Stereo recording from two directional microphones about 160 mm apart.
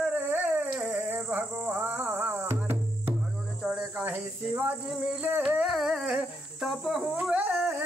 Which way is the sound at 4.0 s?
5° right (ahead or behind).